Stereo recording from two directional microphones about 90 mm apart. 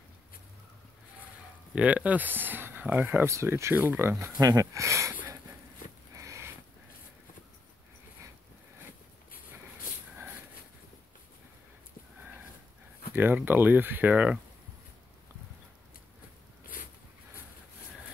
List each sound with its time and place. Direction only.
1.8 s speech: 15° right (ahead or behind)
3.3 s speech: 30° right (ahead or behind)
4.4 s speech: 40° right (ahead or behind)
6.1 s sniff: 35° right (ahead or behind)
13.1 s speech: 20° right (ahead or behind)